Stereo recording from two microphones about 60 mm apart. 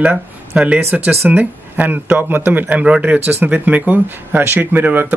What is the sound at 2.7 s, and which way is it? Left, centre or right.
Speech, right.